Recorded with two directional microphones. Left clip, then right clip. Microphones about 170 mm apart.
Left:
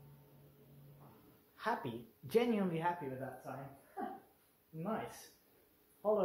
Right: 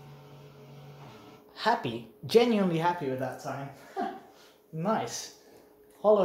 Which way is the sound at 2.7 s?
35° right (ahead or behind).